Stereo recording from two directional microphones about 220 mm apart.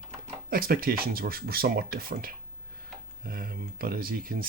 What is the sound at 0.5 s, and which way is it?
Speech, 40° right (ahead or behind).